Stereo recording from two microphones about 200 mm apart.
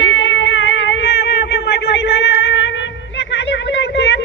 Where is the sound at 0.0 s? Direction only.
80° left; by 1.2 s 65° left (ahead or behind).